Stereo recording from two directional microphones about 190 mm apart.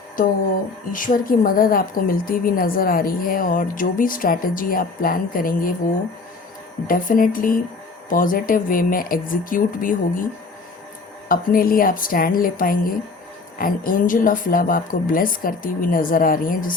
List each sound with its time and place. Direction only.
0.9 s a woman's voice: 45° left (ahead or behind)
6.8 s a woman's voice: 45° left (ahead or behind)
11.3 s a woman's voice: 50° left (ahead or behind)